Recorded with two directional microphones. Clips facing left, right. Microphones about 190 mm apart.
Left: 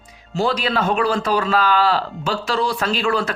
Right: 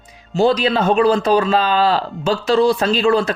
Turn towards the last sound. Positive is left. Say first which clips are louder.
# right 5 dB
turn(degrees=-25)  # may be behind; listen again after turning